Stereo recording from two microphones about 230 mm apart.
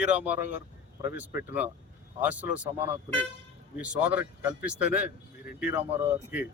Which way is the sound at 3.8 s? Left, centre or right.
Centre.